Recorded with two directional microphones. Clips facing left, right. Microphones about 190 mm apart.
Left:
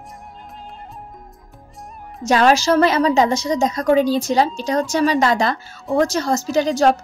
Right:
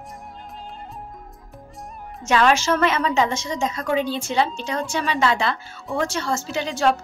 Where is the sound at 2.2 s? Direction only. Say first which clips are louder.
Left 4 dB; 35° left (ahead or behind).